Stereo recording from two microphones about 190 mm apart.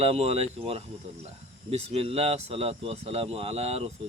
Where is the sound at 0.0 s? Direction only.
35° right (ahead or behind).